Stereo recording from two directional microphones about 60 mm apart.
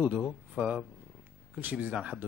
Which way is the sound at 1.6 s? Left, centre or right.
Right.